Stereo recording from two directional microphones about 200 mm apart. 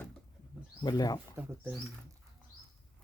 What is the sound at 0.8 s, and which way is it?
Speech, 20° left (ahead or behind).